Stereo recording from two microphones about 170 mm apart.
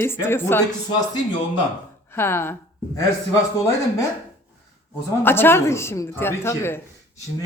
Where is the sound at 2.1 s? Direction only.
15° left (ahead or behind).